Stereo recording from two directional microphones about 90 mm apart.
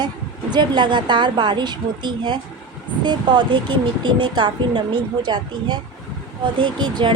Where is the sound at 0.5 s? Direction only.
55° right (ahead or behind).